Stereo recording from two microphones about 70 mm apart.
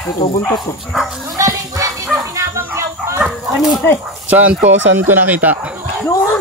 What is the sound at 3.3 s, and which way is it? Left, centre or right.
Bow-wow, centre.